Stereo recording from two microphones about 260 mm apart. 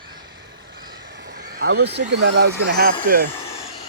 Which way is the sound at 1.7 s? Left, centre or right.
Right.